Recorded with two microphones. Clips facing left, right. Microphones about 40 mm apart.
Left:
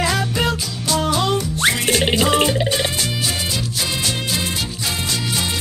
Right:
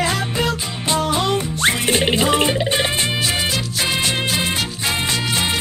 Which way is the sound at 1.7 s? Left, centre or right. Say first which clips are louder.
Even; right.